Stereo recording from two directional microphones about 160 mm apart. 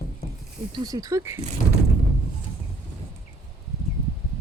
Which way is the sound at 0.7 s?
25° right (ahead or behind).